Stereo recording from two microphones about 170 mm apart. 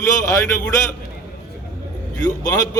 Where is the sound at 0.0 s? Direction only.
20° left (ahead or behind).